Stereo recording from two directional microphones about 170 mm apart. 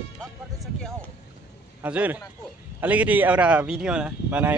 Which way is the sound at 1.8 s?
10° right (ahead or behind).